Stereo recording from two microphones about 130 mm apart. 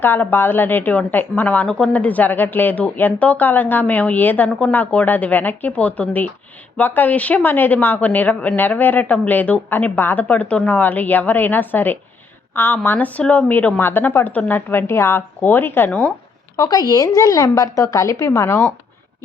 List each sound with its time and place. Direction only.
0.0 s a woman's voice: 15° left (ahead or behind)
16.6 s a woman's voice: 30° left (ahead or behind)